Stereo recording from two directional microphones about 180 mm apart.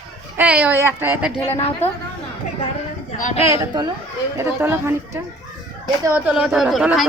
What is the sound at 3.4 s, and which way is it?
A woman's voice, 20° right (ahead or behind).